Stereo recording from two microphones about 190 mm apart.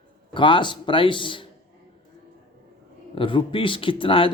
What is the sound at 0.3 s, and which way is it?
Speech, 25° left (ahead or behind).